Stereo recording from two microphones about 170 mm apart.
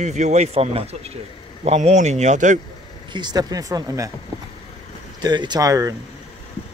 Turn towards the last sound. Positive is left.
turn(degrees=-20)  # may be behind; listen again after turning